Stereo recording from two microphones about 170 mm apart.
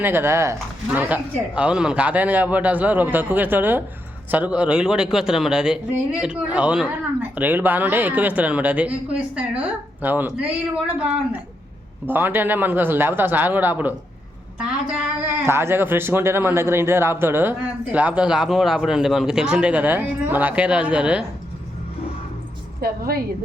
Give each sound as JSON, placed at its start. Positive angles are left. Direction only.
{"t": 0.0, "sound": "a man's voice", "side_deg": -15}
{"t": 15.4, "sound": "speech", "side_deg": -15}
{"t": 22.8, "sound": "a woman's voice", "side_deg": -60}